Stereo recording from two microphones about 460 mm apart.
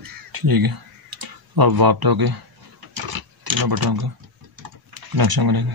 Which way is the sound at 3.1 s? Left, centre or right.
Right.